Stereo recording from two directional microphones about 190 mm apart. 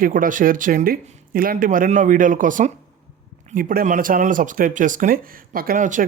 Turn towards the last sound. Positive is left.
turn(degrees=-45)  # may be behind; listen again after turning